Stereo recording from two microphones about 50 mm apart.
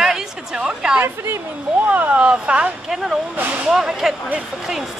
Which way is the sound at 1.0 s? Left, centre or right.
Right.